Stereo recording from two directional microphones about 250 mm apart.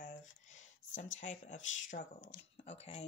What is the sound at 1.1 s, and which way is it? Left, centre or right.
Speech, left.